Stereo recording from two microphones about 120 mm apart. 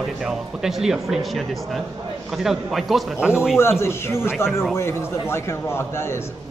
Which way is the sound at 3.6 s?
20° left (ahead or behind).